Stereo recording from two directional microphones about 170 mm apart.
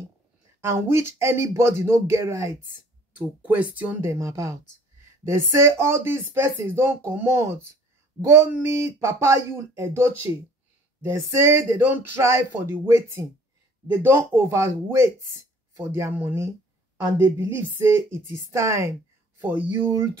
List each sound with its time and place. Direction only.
0.6 s speech: 15° right (ahead or behind)